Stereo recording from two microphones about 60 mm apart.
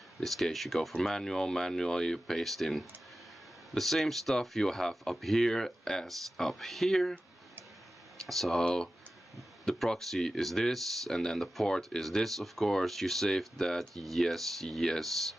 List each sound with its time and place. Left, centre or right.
0.2 s speech: centre
8.2 s speech: centre